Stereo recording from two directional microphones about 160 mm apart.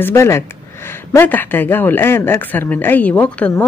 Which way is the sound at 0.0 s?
15° left (ahead or behind).